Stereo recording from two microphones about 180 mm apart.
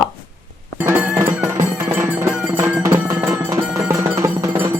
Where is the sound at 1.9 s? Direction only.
15° right (ahead or behind).